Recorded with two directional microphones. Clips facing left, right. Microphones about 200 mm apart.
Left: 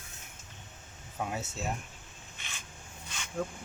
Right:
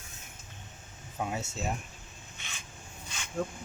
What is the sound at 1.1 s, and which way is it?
Speech, centre (ahead or behind).